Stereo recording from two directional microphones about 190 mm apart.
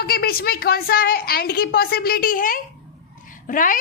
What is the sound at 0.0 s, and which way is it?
A woman's voice, 50° left (ahead or behind).